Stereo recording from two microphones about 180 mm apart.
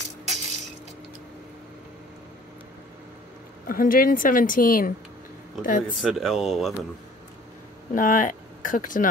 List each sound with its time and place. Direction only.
3.6 s a woman's voice: 50° left (ahead or behind)
5.9 s speech: centre (ahead or behind)
7.9 s speech: 45° left (ahead or behind)